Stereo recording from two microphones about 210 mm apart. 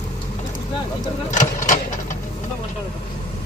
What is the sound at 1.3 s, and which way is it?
Speech, 35° left (ahead or behind).